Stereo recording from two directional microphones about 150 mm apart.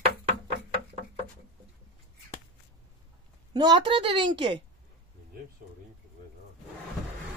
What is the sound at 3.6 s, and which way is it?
A child's voice, 30° right (ahead or behind).